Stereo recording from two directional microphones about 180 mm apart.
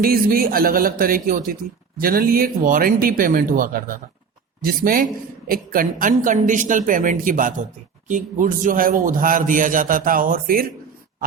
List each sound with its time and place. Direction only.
0.0 s a man's voice: 55° right (ahead or behind)